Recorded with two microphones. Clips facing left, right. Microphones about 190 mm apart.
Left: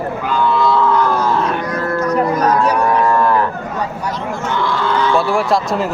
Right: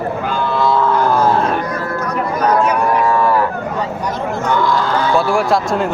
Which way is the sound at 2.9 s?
5° right (ahead or behind).